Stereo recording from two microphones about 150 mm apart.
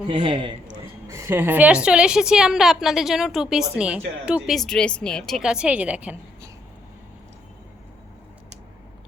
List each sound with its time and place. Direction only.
0.1 s a man's voice: 35° right (ahead or behind)
1.0 s a woman's voice: 20° right (ahead or behind)